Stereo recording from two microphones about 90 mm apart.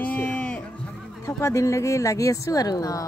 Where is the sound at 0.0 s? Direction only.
15° left (ahead or behind).